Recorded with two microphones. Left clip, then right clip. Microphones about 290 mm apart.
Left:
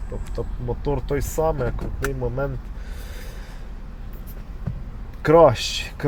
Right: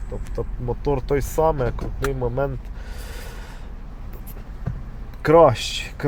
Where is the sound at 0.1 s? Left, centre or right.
Centre.